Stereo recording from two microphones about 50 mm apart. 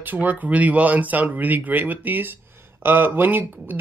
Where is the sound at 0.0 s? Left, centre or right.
Right.